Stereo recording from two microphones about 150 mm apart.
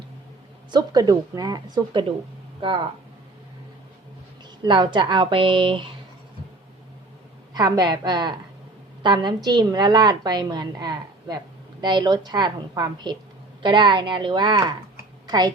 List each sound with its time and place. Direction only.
0.7 s a woman's voice: 25° right (ahead or behind)
4.6 s a woman's voice: 30° right (ahead or behind)
7.5 s a woman's voice: 25° right (ahead or behind)